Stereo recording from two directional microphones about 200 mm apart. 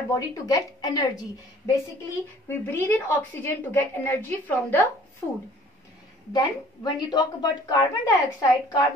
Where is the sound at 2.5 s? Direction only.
10° left (ahead or behind).